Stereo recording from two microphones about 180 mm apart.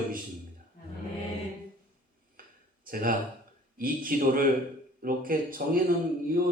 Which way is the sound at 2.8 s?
50° right (ahead or behind).